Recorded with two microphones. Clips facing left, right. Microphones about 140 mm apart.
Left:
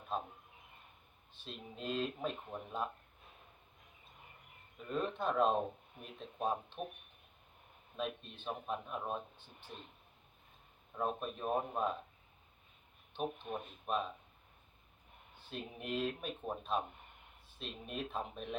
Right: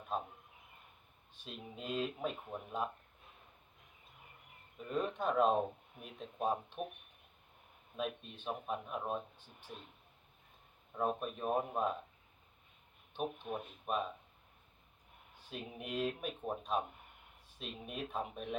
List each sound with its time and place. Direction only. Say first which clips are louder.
1.5 s speech: left 1 dB; 10° right (ahead or behind)
4.9 s speech: right 1 dB; 10° right (ahead or behind)
7.9 s speech: right 1 dB; 5° right (ahead or behind)
10.9 s speech: right 2 dB; 5° right (ahead or behind)
13.1 s speech: even; 5° right (ahead or behind)
15.4 s speech: even; 10° right (ahead or behind)